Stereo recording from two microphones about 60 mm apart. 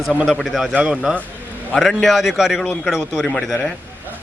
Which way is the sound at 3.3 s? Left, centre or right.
Centre.